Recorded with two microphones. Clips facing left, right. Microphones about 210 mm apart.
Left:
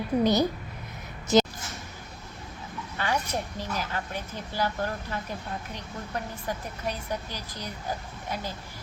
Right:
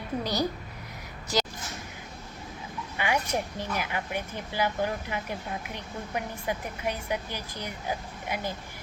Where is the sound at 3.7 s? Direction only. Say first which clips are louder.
Right 2 dB; 15° right (ahead or behind).